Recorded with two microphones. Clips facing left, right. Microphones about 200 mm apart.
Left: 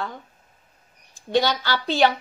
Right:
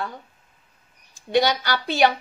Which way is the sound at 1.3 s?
15° right (ahead or behind).